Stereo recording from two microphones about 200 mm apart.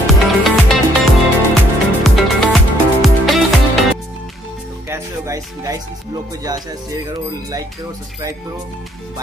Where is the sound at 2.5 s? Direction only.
Centre (ahead or behind).